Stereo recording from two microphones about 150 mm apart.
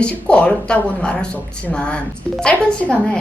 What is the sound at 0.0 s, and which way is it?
Speech, 5° left (ahead or behind).